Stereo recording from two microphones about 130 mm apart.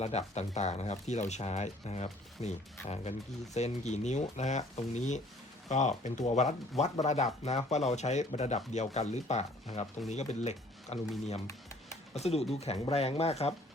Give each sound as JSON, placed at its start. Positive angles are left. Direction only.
{"t": 0.0, "sound": "speech", "side_deg": 55}
{"t": 12.1, "sound": "speech", "side_deg": 55}